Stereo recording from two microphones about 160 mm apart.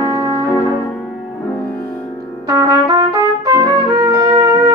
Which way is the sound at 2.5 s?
20° right (ahead or behind).